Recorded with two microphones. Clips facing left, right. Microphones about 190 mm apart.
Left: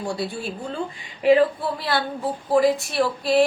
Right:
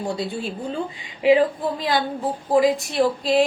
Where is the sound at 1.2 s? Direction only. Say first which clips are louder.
Even; 15° right (ahead or behind).